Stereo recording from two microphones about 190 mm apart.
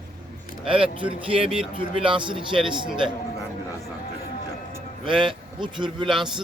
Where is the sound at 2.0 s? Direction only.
25° right (ahead or behind).